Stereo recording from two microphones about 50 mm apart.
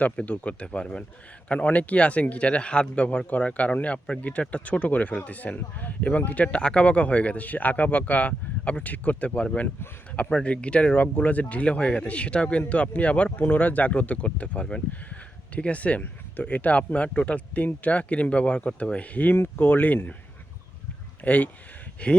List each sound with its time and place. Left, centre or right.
0.0 s speech: left
13.4 s speech: left
21.2 s speech: left